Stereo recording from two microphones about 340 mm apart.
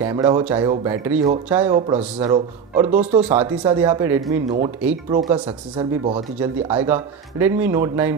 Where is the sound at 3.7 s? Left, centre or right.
Centre.